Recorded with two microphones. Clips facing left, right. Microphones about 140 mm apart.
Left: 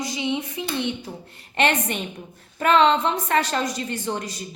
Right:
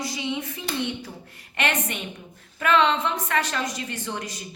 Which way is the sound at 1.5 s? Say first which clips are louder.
Left 5 dB; 30° left (ahead or behind).